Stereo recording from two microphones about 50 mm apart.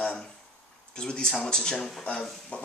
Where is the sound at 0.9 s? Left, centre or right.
Centre.